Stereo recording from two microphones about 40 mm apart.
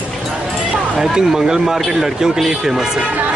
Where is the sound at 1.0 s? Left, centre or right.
Centre.